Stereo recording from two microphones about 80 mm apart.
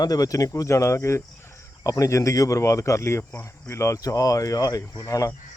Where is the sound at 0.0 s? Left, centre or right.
Left.